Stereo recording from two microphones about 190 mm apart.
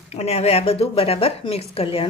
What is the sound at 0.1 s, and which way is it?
Speech, 35° left (ahead or behind).